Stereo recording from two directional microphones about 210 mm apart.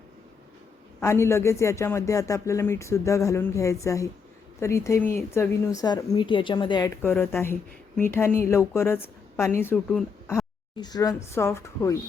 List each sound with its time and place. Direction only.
0.9 s speech: 10° left (ahead or behind)